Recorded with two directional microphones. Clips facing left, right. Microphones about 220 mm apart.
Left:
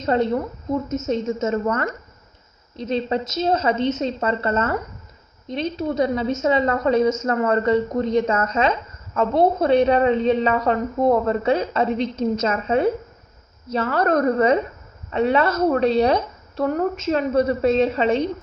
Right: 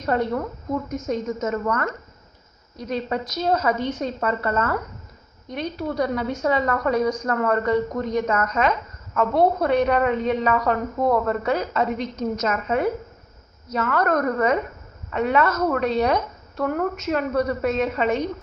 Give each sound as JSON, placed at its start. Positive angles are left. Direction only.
{"t": 0.0, "sound": "a woman's voice", "side_deg": 25}